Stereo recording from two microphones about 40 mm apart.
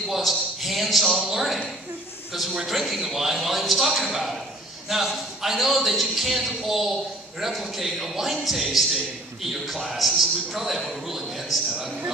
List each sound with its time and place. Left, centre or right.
0.1 s a man's voice: centre